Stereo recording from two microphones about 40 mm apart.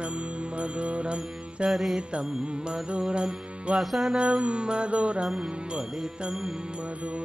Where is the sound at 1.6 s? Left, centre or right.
Centre.